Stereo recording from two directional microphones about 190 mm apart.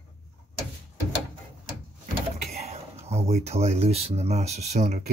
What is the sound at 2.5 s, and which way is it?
Speech, 35° right (ahead or behind).